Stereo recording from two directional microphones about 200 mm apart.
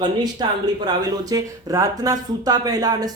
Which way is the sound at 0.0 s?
20° right (ahead or behind).